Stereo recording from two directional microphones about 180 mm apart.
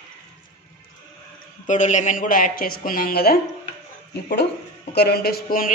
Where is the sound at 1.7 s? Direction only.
40° left (ahead or behind).